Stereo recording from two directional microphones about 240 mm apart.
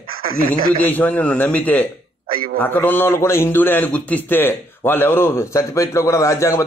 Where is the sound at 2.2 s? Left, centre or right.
Right.